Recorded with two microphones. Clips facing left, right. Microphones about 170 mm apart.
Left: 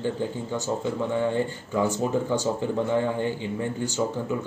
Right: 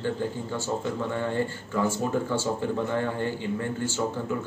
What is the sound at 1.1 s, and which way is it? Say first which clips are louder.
Speech: left 3 dB; 15° left (ahead or behind).